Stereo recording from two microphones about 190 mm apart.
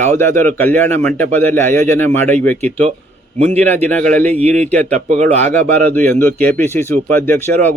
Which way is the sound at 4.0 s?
45° right (ahead or behind).